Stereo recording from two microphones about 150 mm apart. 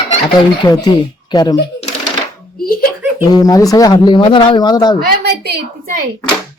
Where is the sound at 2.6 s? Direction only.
75° left (ahead or behind).